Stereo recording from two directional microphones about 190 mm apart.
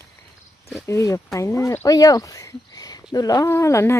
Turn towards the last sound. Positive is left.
turn(degrees=15)  # may be behind; listen again after turning